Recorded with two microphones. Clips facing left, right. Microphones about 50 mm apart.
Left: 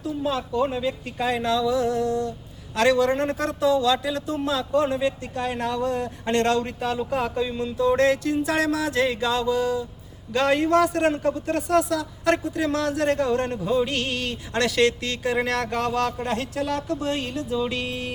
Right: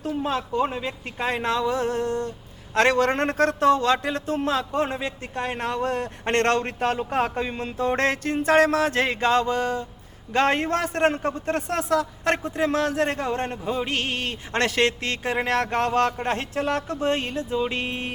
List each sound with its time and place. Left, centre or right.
0.0 s a man's voice: right